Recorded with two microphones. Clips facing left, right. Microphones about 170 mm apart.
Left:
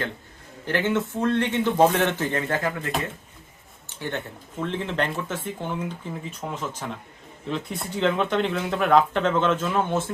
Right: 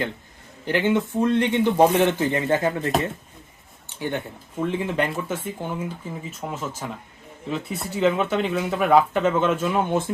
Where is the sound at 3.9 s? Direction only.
10° right (ahead or behind).